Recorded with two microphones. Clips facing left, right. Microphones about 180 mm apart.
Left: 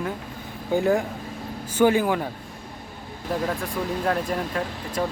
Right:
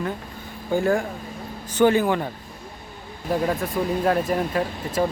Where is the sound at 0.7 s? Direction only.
15° left (ahead or behind).